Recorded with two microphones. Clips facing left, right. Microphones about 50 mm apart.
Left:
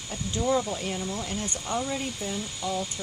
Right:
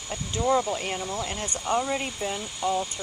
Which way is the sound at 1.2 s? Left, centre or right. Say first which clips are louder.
Right 1 dB; right.